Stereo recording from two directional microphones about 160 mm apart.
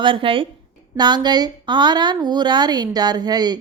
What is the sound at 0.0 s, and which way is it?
A woman's voice, 30° right (ahead or behind).